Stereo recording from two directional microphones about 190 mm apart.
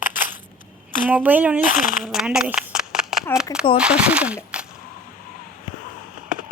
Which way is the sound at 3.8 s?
5° right (ahead or behind).